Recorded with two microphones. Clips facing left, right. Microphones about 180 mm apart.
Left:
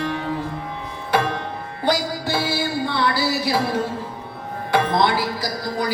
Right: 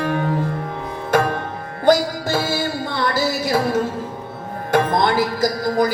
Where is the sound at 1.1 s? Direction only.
45° right (ahead or behind).